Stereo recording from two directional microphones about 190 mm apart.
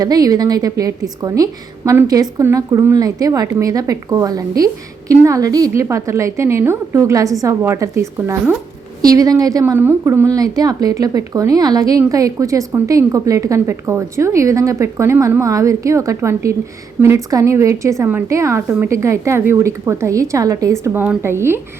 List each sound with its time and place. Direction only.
0.0 s a woman's voice: 20° right (ahead or behind)